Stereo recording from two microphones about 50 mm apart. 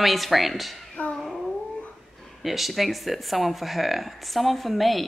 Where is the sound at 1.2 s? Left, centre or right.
Centre.